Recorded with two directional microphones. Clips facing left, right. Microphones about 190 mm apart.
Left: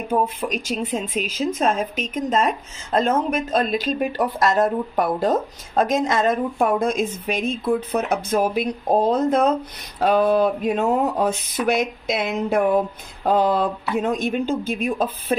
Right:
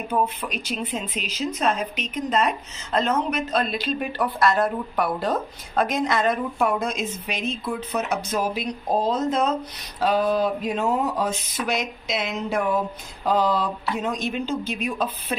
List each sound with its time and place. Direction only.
0.1 s speech: 45° left (ahead or behind)
6.1 s speech: 25° left (ahead or behind)
6.6 s speech: 50° left (ahead or behind)